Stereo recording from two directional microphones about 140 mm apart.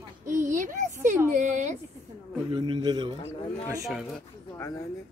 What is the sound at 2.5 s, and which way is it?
Speech, 35° right (ahead or behind).